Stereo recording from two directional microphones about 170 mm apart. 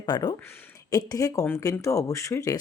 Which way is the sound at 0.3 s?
15° left (ahead or behind).